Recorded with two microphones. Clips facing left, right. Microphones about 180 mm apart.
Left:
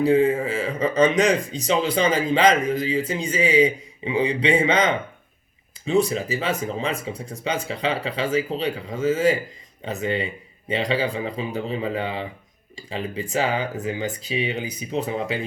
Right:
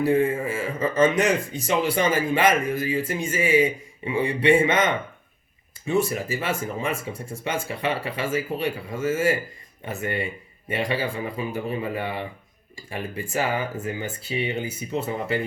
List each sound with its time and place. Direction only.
0.0 s speech: 15° left (ahead or behind)
5.9 s speech: 15° left (ahead or behind)